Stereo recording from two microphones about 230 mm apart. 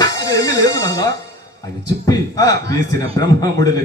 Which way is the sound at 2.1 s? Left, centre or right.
Centre.